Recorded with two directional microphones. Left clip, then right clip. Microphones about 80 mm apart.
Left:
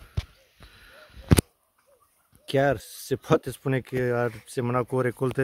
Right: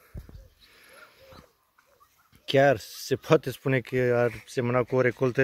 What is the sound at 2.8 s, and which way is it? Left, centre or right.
Speech, left.